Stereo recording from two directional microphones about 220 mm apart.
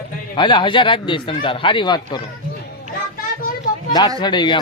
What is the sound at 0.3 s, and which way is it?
Speech, 20° left (ahead or behind).